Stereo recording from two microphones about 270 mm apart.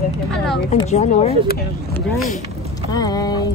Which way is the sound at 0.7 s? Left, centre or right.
Left.